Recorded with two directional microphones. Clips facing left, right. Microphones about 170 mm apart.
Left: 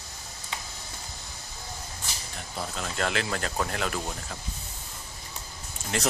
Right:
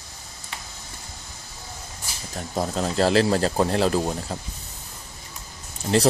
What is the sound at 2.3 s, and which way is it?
Speech, 40° right (ahead or behind).